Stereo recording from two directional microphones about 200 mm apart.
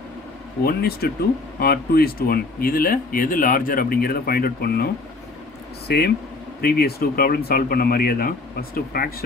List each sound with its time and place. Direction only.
0.7 s speech: 50° left (ahead or behind)
5.9 s speech: 55° left (ahead or behind)